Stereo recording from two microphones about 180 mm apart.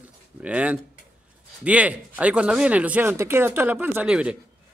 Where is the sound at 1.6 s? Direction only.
5° right (ahead or behind).